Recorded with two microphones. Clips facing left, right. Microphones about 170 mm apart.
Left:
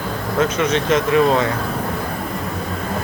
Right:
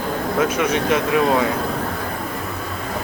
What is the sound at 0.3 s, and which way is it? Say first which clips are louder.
A man's voice: left 2 dB; 10° right (ahead or behind).